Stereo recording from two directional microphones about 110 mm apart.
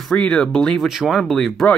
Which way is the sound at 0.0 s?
5° left (ahead or behind).